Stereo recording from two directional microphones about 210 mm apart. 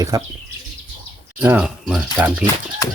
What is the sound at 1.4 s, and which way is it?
Speech, 5° right (ahead or behind).